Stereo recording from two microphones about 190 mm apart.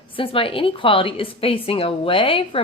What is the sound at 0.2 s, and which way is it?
A woman's voice, 30° left (ahead or behind).